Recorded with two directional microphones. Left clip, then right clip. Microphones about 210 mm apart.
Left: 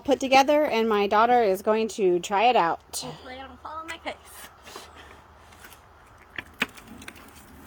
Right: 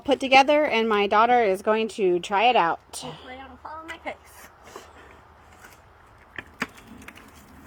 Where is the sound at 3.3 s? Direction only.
15° right (ahead or behind).